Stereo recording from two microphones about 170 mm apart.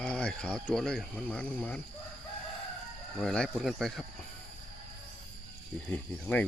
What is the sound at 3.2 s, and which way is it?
Speech, 5° left (ahead or behind).